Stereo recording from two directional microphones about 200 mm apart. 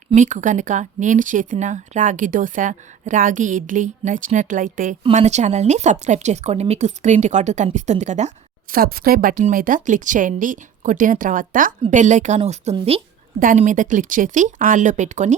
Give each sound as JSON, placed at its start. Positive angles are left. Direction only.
{"t": 0.1, "sound": "speech", "side_deg": -40}
{"t": 8.7, "sound": "speech", "side_deg": -45}
{"t": 13.4, "sound": "speech", "side_deg": -40}